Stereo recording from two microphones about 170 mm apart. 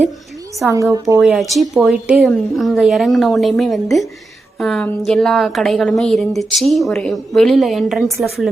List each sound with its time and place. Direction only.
0.7 s a woman's voice: 20° right (ahead or behind)
1.2 s a woman's voice: centre (ahead or behind)